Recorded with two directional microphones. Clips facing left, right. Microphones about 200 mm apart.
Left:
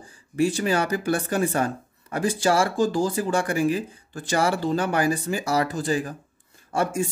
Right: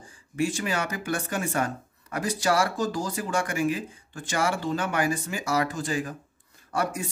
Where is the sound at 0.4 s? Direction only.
35° left (ahead or behind).